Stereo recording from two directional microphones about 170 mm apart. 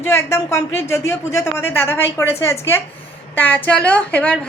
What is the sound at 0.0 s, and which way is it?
A woman's voice, 15° left (ahead or behind).